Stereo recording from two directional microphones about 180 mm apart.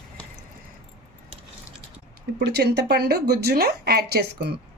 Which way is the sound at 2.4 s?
70° right (ahead or behind).